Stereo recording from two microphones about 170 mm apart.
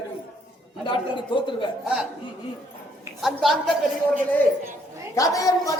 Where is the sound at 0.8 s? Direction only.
30° left (ahead or behind).